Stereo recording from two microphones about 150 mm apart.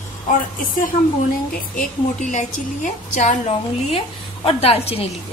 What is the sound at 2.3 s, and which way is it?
A woman's voice, 55° left (ahead or behind).